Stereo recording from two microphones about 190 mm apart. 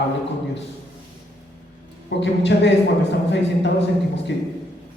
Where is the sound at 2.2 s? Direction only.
65° left (ahead or behind).